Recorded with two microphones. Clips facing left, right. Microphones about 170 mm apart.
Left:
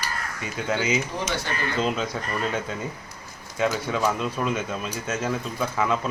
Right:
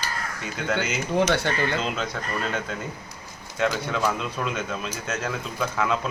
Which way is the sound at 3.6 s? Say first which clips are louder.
Left 1 dB; 5° left (ahead or behind).